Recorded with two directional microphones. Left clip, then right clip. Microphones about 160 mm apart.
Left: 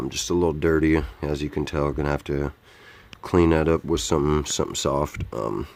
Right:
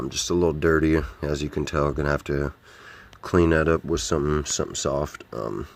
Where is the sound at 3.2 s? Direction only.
10° left (ahead or behind).